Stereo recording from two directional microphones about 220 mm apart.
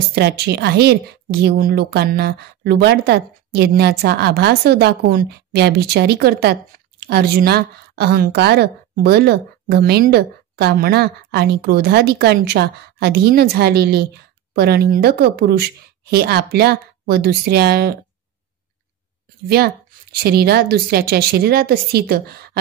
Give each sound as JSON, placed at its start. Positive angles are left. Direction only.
{"t": 0.1, "sound": "a woman's voice", "side_deg": -50}
{"t": 20.2, "sound": "a woman's voice", "side_deg": -45}